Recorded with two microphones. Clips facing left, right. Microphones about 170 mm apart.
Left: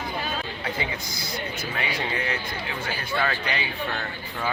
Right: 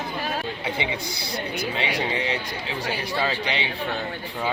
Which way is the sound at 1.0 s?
65° right (ahead or behind).